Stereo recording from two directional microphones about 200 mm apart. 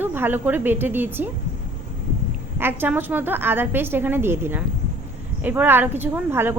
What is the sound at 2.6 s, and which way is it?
A woman's voice, 10° right (ahead or behind).